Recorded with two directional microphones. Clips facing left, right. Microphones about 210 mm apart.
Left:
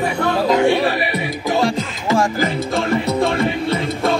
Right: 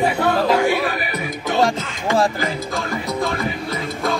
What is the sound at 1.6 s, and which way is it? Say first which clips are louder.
Music: right 2 dB; 35° right (ahead or behind).